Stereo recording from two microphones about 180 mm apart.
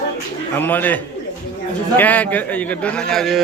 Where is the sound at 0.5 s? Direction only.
10° left (ahead or behind).